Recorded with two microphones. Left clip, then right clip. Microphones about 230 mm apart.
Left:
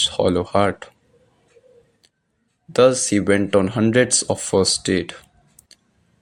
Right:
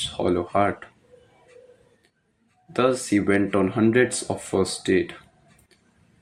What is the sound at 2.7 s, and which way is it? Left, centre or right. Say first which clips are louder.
Speech: left 6 dB; left.